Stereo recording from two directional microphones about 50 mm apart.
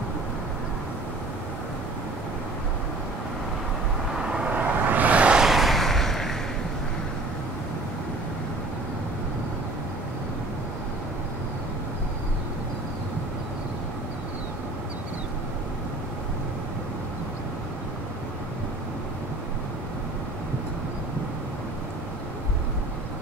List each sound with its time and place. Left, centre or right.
4.1 s vehicle: centre
4.5 s vehicle: right
5.4 s a sound: centre